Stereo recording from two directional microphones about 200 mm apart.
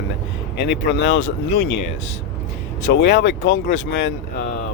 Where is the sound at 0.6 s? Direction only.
55° left (ahead or behind).